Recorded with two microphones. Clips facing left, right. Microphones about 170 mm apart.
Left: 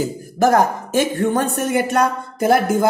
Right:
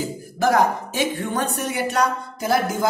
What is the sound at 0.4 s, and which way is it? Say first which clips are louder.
A woman's voice: left 3 dB; 45° left (ahead or behind).